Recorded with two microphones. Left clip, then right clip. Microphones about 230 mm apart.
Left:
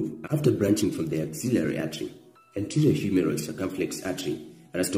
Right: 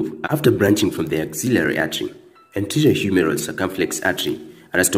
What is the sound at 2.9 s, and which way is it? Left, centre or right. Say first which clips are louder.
Speech: right 8 dB; centre.